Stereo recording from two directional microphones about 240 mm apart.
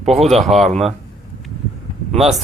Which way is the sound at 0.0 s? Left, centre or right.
Right.